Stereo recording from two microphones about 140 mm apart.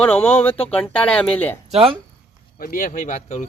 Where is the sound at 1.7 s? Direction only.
40° right (ahead or behind).